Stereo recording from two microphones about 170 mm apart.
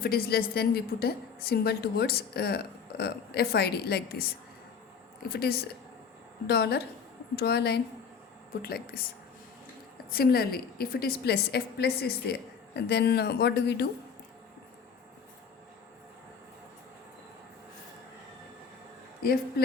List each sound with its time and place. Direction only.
0.0 s a woman's voice: 60° left (ahead or behind)
5.3 s a woman's voice: 65° left (ahead or behind)
10.1 s a woman's voice: 65° left (ahead or behind)
19.2 s a woman's voice: 65° left (ahead or behind)